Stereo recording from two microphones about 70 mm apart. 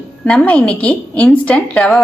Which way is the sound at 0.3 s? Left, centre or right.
Centre.